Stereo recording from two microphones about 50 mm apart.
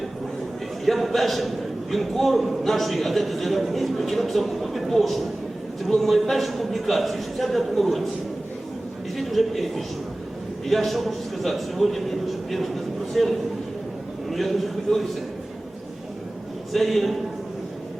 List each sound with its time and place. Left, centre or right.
0.9 s a man's voice: centre
9.1 s a man's voice: centre
16.7 s a man's voice: centre